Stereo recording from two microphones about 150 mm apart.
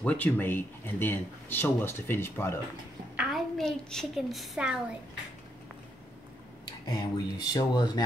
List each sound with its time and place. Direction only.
0.0 s speech: 10° left (ahead or behind)
3.2 s a woman's voice: centre (ahead or behind)
6.6 s speech: 25° left (ahead or behind)